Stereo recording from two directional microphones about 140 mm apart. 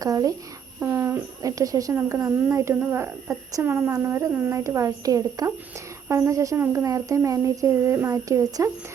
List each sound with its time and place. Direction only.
0.0 s speech: 25° right (ahead or behind)